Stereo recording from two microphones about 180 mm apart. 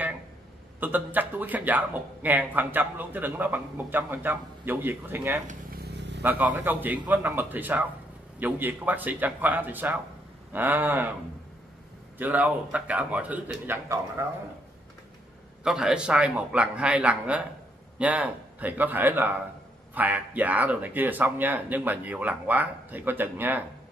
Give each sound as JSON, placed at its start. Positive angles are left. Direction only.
{"t": 0.7, "sound": "speech", "side_deg": -10}
{"t": 5.9, "sound": "vehicle", "side_deg": -75}
{"t": 6.2, "sound": "speech", "side_deg": -10}
{"t": 12.2, "sound": "speech", "side_deg": -10}
{"t": 15.6, "sound": "speech", "side_deg": -5}